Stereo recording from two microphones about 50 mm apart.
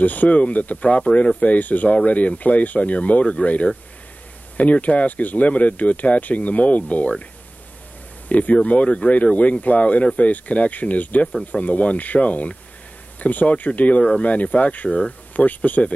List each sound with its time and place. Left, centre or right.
0.0 s speech: left
8.3 s speech: left